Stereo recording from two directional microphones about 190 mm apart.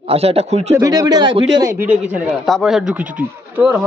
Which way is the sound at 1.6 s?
10° right (ahead or behind).